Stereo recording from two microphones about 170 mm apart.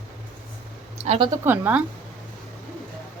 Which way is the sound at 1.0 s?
40° right (ahead or behind).